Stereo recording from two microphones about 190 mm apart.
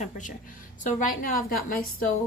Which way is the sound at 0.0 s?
40° left (ahead or behind).